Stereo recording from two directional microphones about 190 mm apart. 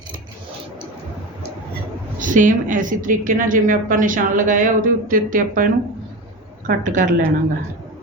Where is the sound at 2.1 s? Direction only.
45° right (ahead or behind).